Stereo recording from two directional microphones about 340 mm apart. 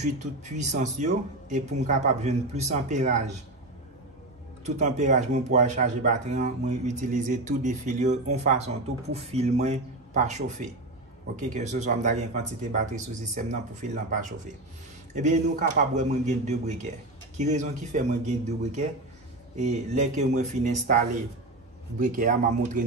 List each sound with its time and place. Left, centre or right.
0.0 s speech: right
4.6 s speech: centre
22.0 s speech: right